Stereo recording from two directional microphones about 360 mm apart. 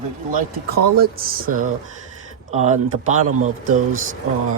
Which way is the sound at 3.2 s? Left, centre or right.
Right.